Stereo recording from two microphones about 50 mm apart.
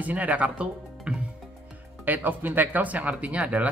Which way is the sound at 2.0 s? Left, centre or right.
Right.